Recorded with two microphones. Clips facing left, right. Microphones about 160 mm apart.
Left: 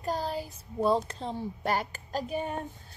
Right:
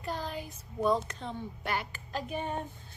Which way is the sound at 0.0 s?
35° left (ahead or behind).